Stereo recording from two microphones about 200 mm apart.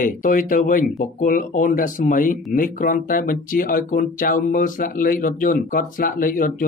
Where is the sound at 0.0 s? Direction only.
40° left (ahead or behind).